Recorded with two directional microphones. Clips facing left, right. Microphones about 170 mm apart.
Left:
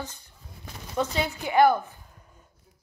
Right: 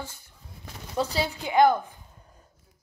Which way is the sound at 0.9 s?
35° right (ahead or behind).